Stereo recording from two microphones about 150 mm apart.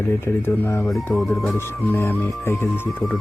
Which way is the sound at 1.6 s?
15° left (ahead or behind).